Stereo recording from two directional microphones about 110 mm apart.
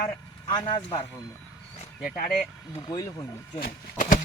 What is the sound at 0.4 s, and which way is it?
Speech, 50° left (ahead or behind).